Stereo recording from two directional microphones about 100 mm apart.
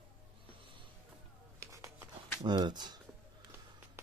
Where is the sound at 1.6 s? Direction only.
30° right (ahead or behind).